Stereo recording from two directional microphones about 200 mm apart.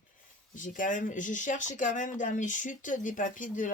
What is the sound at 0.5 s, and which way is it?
Speech, 40° left (ahead or behind).